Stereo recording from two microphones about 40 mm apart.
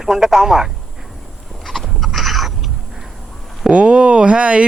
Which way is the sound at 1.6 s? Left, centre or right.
Centre.